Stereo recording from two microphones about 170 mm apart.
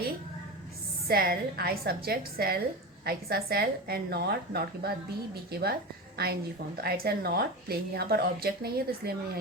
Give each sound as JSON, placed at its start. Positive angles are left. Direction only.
{"t": 1.0, "sound": "a woman's voice", "side_deg": -60}